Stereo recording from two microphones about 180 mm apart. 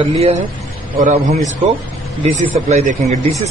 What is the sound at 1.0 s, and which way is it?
A man's voice, 45° right (ahead or behind).